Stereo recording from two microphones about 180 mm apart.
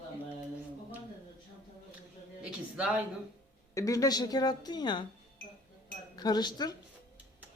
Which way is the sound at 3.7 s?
20° left (ahead or behind).